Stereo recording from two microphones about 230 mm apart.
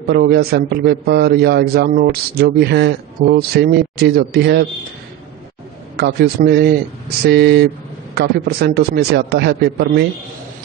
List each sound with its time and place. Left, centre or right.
0.1 s a man's voice: right
5.9 s a man's voice: right